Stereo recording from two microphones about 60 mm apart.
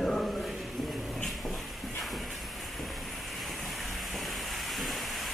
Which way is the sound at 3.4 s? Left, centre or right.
Centre.